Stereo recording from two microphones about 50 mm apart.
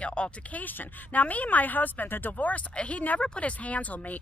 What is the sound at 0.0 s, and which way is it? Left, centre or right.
A woman's voice, left.